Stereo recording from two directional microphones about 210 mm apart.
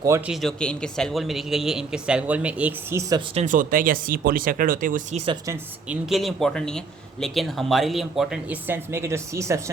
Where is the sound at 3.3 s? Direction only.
35° right (ahead or behind).